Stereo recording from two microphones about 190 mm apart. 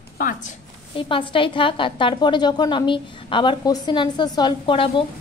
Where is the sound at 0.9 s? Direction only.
25° left (ahead or behind).